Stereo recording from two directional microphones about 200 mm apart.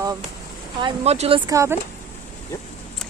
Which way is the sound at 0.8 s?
30° right (ahead or behind).